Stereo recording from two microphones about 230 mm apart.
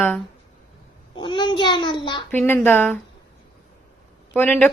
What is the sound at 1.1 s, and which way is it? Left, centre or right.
A child's voice, centre.